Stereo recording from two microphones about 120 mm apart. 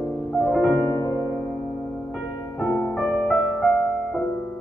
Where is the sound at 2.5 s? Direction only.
10° left (ahead or behind).